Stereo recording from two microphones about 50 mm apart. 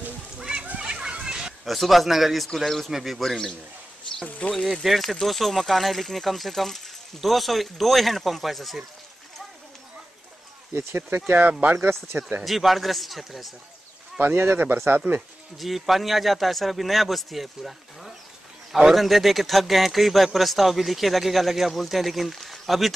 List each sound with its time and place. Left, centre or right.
0.4 s splash: centre
0.7 s children playing: right
1.6 s speech: centre
4.2 s speech: left
4.8 s speech: centre
10.7 s speech: right
12.4 s speech: centre
14.2 s speech: right
15.5 s speech: centre